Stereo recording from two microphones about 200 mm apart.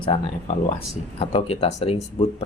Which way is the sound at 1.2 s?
30° left (ahead or behind).